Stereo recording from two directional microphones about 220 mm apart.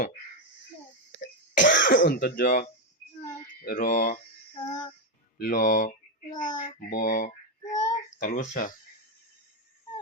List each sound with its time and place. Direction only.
1.6 s speech: 35° left (ahead or behind)
3.5 s mantra: 40° left (ahead or behind)
3.9 s speech: 35° left (ahead or behind)
4.7 s music: 20° left (ahead or behind)
5.4 s speech: 35° left (ahead or behind)
7.2 s child singing: 35° left (ahead or behind)
7.7 s child singing: 20° left (ahead or behind)
8.2 s speech: 35° left (ahead or behind)